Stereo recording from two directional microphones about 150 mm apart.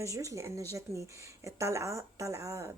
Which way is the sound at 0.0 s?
20° right (ahead or behind).